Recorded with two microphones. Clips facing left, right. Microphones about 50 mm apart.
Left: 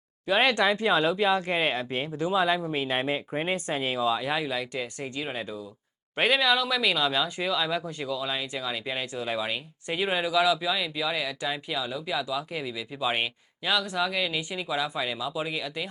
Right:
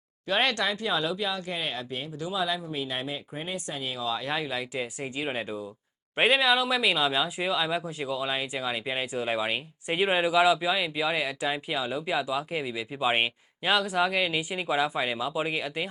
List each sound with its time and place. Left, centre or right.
0.3 s speech: centre
0.5 s speech: left
4.0 s speech: centre
8.0 s speech: right